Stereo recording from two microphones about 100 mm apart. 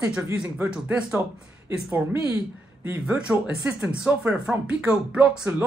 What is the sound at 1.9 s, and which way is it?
Speech, 25° right (ahead or behind).